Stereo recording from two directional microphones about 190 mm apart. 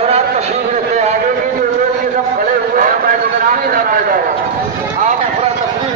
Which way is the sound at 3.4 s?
50° right (ahead or behind).